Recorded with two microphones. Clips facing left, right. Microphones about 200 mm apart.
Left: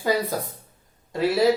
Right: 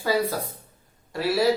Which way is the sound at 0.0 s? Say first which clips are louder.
Even; 15° left (ahead or behind).